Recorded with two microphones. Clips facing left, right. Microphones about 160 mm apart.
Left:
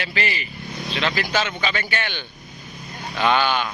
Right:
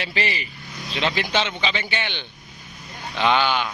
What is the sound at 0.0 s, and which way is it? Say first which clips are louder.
Speech: even; 30° right (ahead or behind).